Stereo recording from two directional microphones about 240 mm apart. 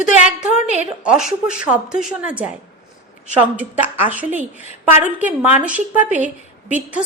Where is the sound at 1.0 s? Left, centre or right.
Centre.